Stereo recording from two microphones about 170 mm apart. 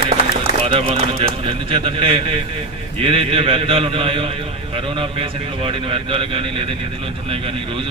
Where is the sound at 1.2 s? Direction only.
30° right (ahead or behind).